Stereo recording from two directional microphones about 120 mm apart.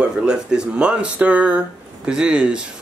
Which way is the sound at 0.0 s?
5° right (ahead or behind).